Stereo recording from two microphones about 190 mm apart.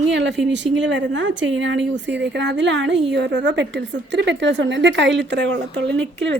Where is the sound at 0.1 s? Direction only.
70° right (ahead or behind).